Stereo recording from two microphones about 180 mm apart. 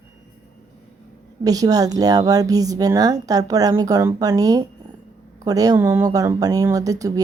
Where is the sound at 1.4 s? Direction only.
20° right (ahead or behind).